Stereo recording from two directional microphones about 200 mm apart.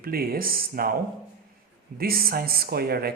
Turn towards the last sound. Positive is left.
turn(degrees=-50)  # may be behind; listen again after turning